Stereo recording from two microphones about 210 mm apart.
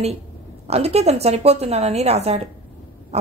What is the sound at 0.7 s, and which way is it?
A woman's voice, 30° right (ahead or behind).